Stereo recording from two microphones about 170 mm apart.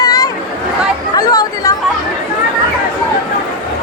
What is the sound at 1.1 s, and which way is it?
Chatter, 20° left (ahead or behind).